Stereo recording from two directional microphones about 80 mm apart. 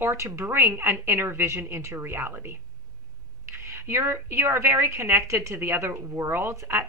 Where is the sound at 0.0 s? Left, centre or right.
Right.